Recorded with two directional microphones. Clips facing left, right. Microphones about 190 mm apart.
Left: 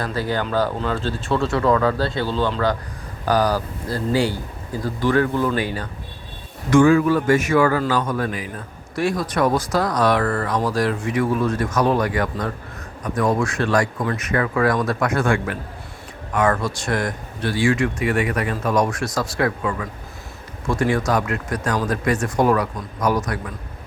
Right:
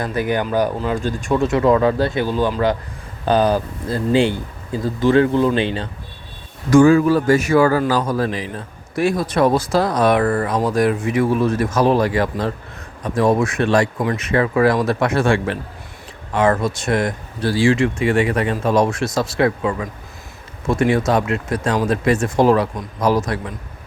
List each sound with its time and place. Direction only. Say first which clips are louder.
0.0 s a man's voice: right 3 dB; 20° right (ahead or behind)
6.7 s a man's voice: right 3 dB; 35° right (ahead or behind)